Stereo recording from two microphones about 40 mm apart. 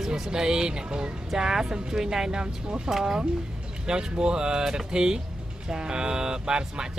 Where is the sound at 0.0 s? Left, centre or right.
Centre.